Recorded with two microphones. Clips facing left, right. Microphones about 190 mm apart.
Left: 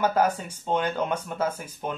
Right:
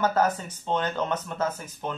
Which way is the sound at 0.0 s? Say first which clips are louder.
Left 1 dB; 10° left (ahead or behind).